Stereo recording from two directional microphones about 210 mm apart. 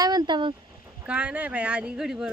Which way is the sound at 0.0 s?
20° right (ahead or behind).